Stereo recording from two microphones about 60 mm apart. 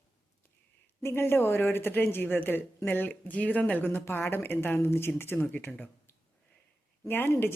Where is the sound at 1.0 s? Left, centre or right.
Left.